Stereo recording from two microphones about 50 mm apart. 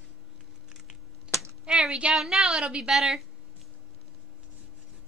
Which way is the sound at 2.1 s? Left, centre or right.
Centre.